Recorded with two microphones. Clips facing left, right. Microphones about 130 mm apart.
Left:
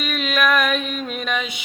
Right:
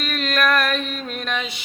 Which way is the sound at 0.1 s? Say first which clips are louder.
Even; centre (ahead or behind).